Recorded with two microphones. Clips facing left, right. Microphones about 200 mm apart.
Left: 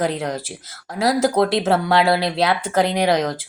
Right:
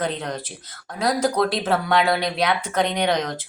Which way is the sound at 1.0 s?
25° left (ahead or behind).